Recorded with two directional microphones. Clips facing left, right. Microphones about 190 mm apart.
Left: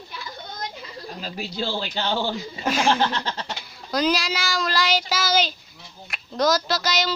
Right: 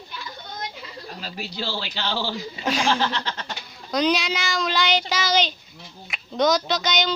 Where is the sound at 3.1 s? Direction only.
40° left (ahead or behind).